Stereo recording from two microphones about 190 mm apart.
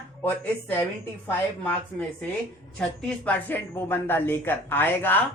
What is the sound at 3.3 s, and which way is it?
Speech, 10° left (ahead or behind).